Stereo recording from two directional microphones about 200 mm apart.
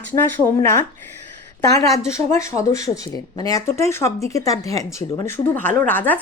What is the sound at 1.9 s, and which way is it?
Speech, 15° left (ahead or behind).